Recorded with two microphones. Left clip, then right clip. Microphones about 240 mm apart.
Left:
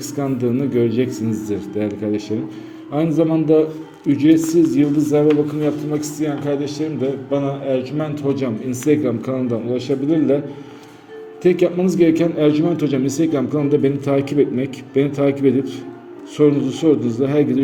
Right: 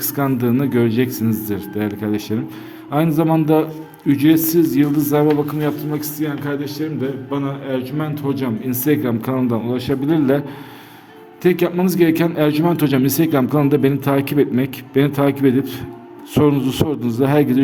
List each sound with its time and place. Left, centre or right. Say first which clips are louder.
0.0 s a man's voice: right 2 dB; right
11.4 s a man's voice: left 1 dB; right